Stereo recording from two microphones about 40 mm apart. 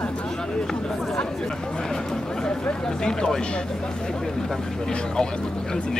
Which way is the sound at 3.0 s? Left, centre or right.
Centre.